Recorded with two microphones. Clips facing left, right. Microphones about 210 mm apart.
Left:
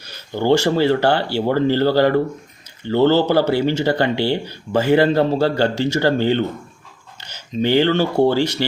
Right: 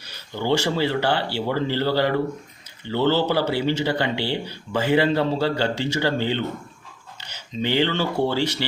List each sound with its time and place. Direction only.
0.3 s speech: 45° left (ahead or behind)